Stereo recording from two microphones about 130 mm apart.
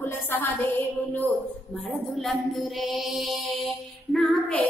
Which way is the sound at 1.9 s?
Centre (ahead or behind).